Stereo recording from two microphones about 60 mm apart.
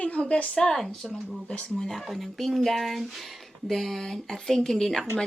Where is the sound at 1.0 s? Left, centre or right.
Centre.